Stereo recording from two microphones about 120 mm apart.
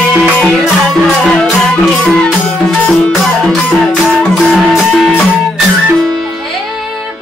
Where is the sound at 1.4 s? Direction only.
5° left (ahead or behind).